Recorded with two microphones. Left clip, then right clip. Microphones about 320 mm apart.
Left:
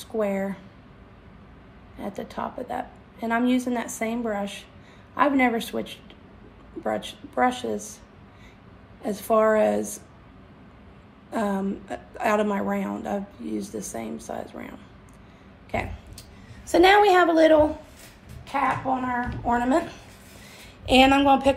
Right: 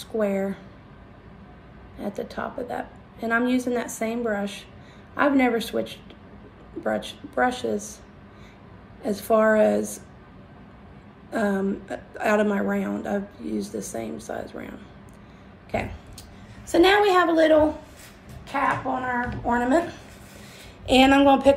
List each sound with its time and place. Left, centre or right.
0.0 s a woman's voice: centre
2.0 s a woman's voice: centre
9.0 s a woman's voice: centre
11.2 s a woman's voice: centre
16.7 s a woman's voice: centre